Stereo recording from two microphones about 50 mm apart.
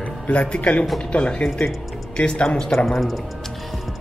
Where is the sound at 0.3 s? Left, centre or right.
Left; by 3.2 s centre.